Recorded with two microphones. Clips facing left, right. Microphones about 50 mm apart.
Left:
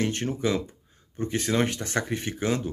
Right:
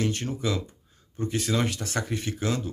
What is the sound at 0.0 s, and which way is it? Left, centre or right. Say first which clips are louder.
Speech: left 2 dB; left.